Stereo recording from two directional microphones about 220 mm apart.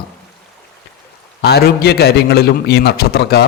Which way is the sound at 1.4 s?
45° left (ahead or behind).